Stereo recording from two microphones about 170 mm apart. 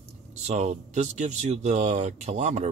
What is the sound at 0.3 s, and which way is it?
Speech, 40° right (ahead or behind).